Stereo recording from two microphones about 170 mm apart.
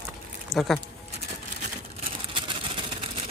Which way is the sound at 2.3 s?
30° right (ahead or behind).